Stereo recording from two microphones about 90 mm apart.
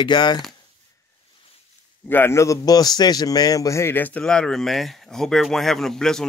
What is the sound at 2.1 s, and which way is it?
Speech, 25° left (ahead or behind).